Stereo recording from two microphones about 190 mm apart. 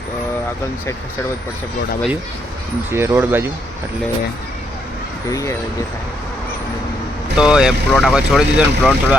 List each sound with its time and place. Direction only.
2.9 s speech: 15° right (ahead or behind)
5.3 s speech: 15° left (ahead or behind)
7.3 s speech: 5° right (ahead or behind)